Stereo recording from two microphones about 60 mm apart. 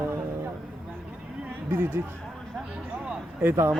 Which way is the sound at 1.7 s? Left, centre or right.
Right.